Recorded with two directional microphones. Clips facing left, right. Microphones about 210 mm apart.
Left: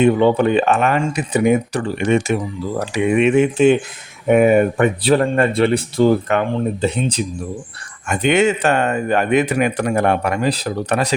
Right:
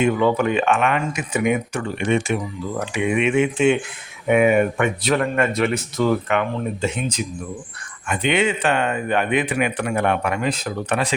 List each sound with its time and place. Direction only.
0.0 s speech: 30° left (ahead or behind)
8.0 s speech: 45° left (ahead or behind)